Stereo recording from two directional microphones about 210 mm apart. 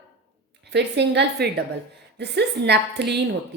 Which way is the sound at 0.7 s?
55° right (ahead or behind).